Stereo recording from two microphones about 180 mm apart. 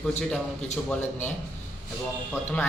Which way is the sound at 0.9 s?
10° left (ahead or behind).